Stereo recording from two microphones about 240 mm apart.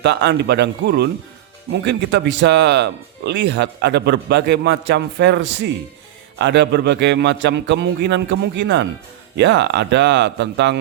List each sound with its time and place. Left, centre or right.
0.0 s speech: right